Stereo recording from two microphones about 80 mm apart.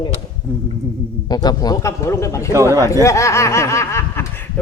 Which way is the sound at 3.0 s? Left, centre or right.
Left.